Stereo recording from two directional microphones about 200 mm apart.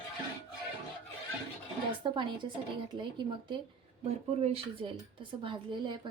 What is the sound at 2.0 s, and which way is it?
A woman's voice, 25° right (ahead or behind).